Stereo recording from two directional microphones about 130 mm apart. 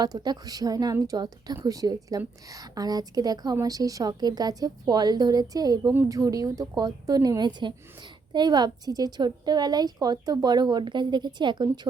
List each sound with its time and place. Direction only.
0.0 s a woman's voice: 30° right (ahead or behind)